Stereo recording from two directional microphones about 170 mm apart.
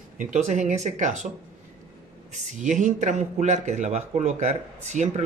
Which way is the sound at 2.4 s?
45° right (ahead or behind).